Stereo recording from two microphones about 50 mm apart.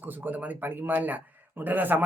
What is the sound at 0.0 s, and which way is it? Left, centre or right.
Speech, right.